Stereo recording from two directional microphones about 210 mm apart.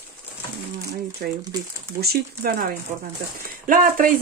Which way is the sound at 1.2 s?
45° right (ahead or behind).